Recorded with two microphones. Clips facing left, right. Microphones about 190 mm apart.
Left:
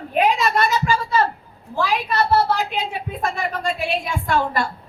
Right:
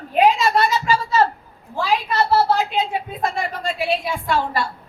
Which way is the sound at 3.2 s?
50° left (ahead or behind).